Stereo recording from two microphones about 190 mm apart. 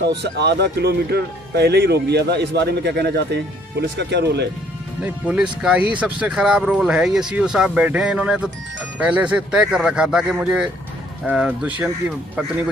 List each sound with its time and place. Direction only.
0.0 s speech: 65° right (ahead or behind)
5.0 s speech: 5° right (ahead or behind)